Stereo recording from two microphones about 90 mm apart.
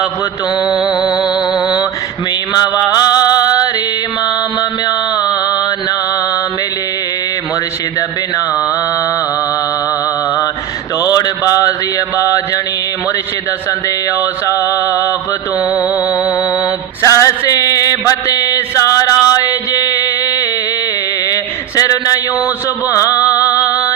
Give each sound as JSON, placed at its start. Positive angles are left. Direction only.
{"t": 0.6, "sound": "mantra", "side_deg": -5}
{"t": 0.9, "sound": "music", "side_deg": 50}
{"t": 1.6, "sound": "mantra", "side_deg": 50}
{"t": 4.9, "sound": "mantra", "side_deg": 45}
{"t": 11.0, "sound": "mantra", "side_deg": 40}
{"t": 13.7, "sound": "mantra", "side_deg": 35}
{"t": 15.7, "sound": "music", "side_deg": 45}
{"t": 17.0, "sound": "mantra", "side_deg": 35}
{"t": 21.8, "sound": "a sound", "side_deg": 40}
{"t": 23.3, "sound": "music", "side_deg": 40}